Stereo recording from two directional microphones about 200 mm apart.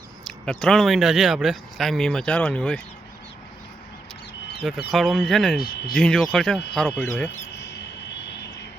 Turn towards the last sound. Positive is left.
turn(degrees=10)  # may be behind; listen again after turning